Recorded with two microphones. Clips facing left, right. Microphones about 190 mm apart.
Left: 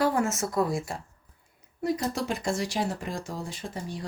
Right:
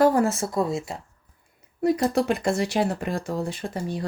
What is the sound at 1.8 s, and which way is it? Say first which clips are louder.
Speech: right 7 dB; 60° right (ahead or behind).